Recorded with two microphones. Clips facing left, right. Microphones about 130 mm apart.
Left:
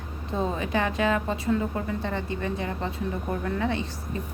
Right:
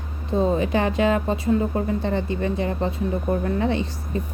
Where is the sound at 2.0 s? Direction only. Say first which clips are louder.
Right 6 dB; 20° right (ahead or behind).